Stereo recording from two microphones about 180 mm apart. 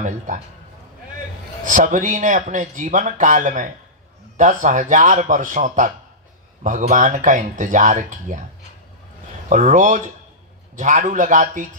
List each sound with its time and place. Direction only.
1.6 s speech: 45° right (ahead or behind)
9.5 s speech: 45° right (ahead or behind)